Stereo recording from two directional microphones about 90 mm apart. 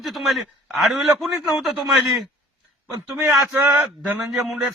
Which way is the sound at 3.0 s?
35° right (ahead or behind).